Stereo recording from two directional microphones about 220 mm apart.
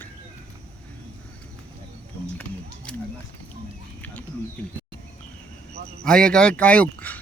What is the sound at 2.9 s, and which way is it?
Speech, 5° left (ahead or behind).